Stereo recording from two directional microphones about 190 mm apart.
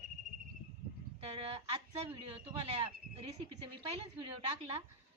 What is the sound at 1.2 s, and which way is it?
A woman's voice, 30° right (ahead or behind).